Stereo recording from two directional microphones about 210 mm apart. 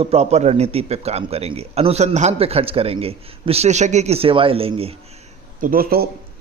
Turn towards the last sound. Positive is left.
turn(degrees=-45)  # may be behind; listen again after turning